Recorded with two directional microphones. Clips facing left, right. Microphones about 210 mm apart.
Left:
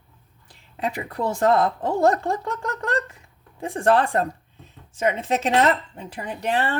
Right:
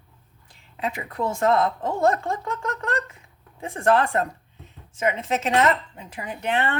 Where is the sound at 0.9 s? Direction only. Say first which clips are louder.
Left 1 dB; 35° left (ahead or behind).